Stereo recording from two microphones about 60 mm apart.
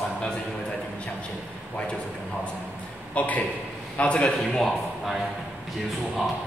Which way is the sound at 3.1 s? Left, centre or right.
Left.